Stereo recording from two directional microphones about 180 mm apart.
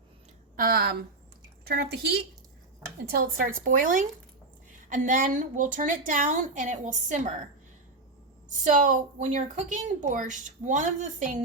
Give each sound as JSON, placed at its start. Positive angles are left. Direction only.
{"t": 0.5, "sound": "speech", "side_deg": -55}
{"t": 3.1, "sound": "a woman's voice", "side_deg": -50}
{"t": 8.4, "sound": "a woman's voice", "side_deg": -45}